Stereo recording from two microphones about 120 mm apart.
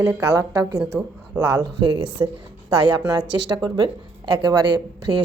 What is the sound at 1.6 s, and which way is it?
Speech, 40° right (ahead or behind).